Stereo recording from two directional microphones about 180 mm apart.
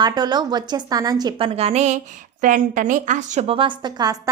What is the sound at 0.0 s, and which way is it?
A woman's voice, 25° right (ahead or behind).